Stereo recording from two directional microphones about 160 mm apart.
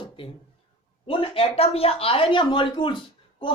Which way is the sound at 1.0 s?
35° left (ahead or behind).